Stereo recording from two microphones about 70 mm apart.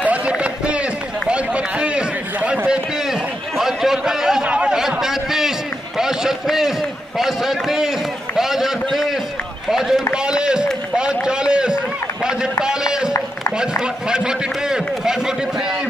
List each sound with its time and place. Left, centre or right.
0.0 s run: centre
3.1 s a sound: centre
5.9 s run: centre
7.2 s a man's voice: centre
8.4 s run: centre
9.7 s speech: centre
10.1 s run: centre
13.6 s speech: centre